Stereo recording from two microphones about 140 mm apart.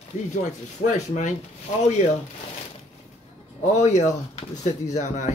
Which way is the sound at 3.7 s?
60° left (ahead or behind).